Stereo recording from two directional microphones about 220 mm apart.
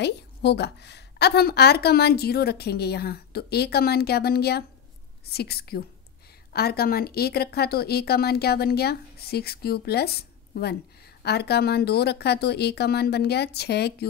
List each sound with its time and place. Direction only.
0.0 s a woman's voice: 50° left (ahead or behind)